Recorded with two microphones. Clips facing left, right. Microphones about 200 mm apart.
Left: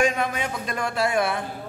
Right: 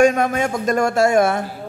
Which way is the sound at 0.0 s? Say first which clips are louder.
Right 8 dB; 45° right (ahead or behind).